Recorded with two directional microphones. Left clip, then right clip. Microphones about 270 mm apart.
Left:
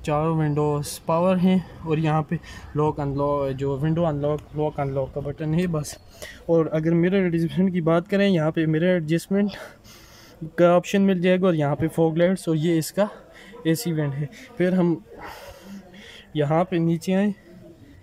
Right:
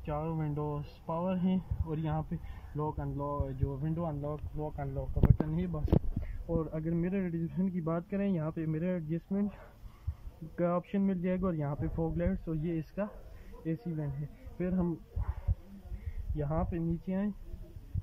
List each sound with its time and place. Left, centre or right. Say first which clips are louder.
0.0 s speech: left 14 dB; centre; by 15.3 s left
16.3 s speech: left 14 dB; left